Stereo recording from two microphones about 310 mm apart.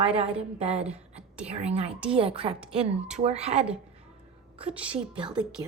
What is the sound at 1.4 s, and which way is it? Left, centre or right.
A woman's voice, centre.